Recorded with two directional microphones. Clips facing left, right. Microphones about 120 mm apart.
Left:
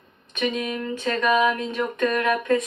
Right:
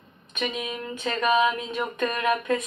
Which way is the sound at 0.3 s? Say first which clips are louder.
Left 5 dB; 20° right (ahead or behind).